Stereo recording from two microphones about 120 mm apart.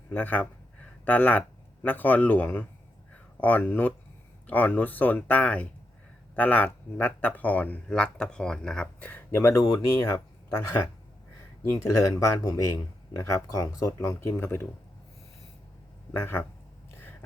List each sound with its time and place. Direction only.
0.1 s speech: 15° left (ahead or behind); by 10.2 s 30° left (ahead or behind)
11.8 s speech: 25° left (ahead or behind)
16.1 s speech: 20° left (ahead or behind)